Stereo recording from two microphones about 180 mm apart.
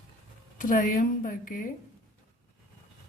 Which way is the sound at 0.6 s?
45° left (ahead or behind).